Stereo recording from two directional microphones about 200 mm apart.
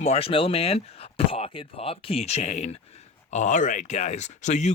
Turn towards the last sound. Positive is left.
turn(degrees=35)  # may be behind; listen again after turning